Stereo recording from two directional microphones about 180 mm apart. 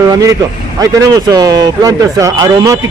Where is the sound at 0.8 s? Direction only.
20° right (ahead or behind).